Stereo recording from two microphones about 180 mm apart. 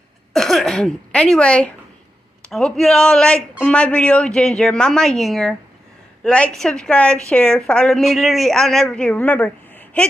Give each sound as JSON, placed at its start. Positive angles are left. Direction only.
{"t": 0.3, "sound": "a woman's voice", "side_deg": 0}